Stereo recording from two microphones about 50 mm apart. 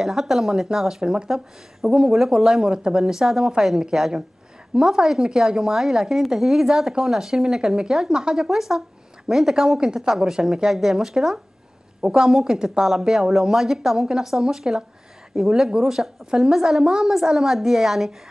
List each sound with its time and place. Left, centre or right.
0.0 s a woman's voice: centre
1.0 s a woman's voice: centre